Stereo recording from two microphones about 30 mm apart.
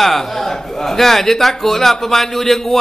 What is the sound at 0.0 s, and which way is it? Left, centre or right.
A man's voice, centre.